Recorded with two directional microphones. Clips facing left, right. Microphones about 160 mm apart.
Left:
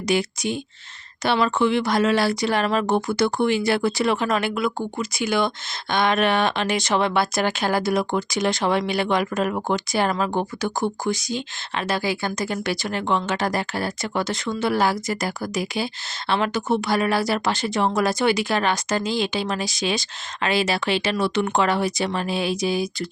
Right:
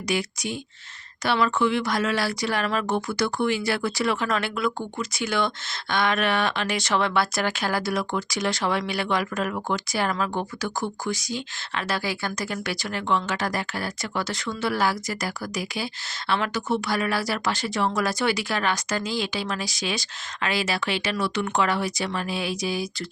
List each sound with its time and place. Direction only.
0.1 s speech: 25° left (ahead or behind)